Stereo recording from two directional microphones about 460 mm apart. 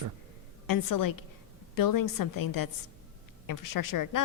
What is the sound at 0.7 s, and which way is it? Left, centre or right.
A woman's voice, left.